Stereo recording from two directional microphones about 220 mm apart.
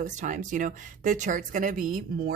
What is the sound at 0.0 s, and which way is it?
A woman's voice, 35° right (ahead or behind).